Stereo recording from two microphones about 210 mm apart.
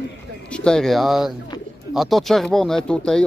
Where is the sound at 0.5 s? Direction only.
5° left (ahead or behind).